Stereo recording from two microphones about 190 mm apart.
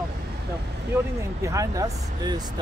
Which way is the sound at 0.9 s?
15° right (ahead or behind).